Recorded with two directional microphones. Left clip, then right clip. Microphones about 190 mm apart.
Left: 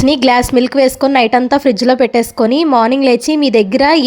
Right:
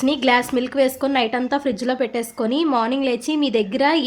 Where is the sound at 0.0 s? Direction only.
35° left (ahead or behind).